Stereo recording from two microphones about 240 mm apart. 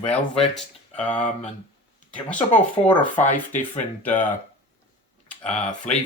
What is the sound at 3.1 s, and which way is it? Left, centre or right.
Speech, left.